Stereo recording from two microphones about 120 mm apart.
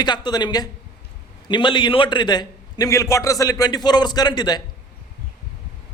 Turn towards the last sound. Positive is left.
turn(degrees=35)  # may be behind; listen again after turning